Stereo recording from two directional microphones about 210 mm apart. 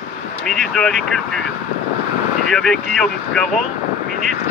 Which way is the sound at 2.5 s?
Centre (ahead or behind).